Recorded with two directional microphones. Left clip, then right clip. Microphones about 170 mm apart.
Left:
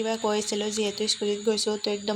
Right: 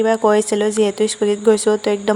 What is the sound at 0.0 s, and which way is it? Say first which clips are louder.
Speech: right 12 dB; 55° right (ahead or behind).